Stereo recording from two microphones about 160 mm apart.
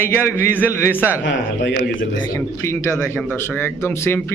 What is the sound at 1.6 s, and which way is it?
Speech, 90° left.